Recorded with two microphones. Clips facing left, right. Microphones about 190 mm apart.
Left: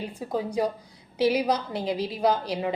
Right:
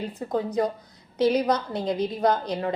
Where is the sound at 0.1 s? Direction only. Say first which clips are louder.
Right 2 dB; 10° left (ahead or behind).